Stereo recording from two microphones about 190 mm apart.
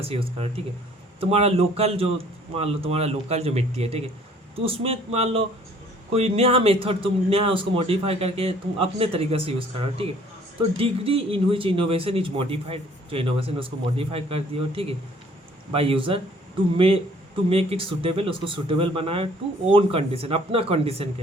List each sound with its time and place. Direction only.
0.1 s speech: 30° right (ahead or behind)